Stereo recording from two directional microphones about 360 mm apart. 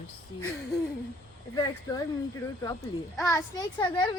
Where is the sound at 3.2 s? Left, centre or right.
Centre.